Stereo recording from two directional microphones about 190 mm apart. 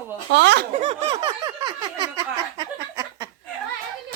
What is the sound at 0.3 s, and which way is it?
Speech, 65° right (ahead or behind).